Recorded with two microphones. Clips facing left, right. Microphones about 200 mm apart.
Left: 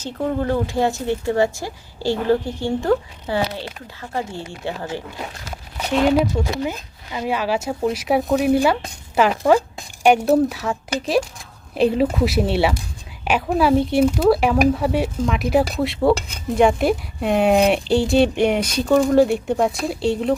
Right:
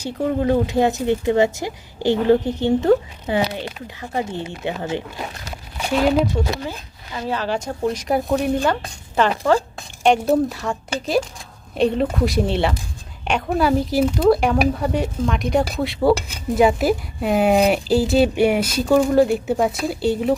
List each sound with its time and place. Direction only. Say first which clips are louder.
0.0 s speech: right 2 dB; 15° right (ahead or behind)
6.7 s speech: left 3 dB; 15° left (ahead or behind); by 20.3 s centre (ahead or behind)